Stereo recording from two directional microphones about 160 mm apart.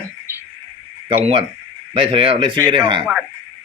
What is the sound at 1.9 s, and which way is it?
Speech, 30° right (ahead or behind).